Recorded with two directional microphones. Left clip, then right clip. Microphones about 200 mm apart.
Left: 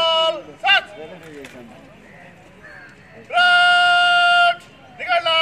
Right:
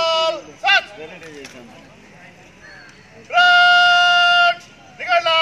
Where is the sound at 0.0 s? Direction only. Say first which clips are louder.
Left 1 dB; 10° left (ahead or behind).